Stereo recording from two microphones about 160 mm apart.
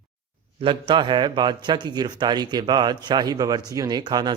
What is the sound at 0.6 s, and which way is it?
A man's voice, 30° right (ahead or behind).